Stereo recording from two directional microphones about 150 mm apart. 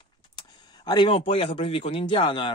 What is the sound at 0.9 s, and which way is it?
A man's voice, 35° left (ahead or behind).